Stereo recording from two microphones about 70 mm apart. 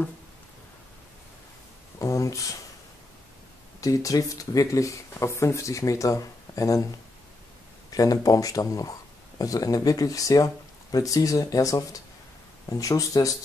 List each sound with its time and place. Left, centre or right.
2.0 s a sound: left
3.8 s speech: left
7.9 s speech: left